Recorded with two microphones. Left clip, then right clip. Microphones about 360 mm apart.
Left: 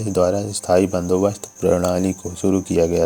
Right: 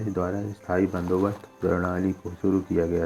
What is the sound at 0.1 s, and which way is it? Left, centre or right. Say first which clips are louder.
Speech: left 11 dB; left.